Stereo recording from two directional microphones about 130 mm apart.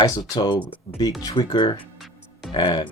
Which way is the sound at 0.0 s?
30° left (ahead or behind).